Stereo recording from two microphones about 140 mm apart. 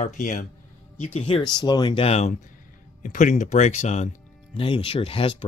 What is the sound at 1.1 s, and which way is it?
Speech, 40° left (ahead or behind).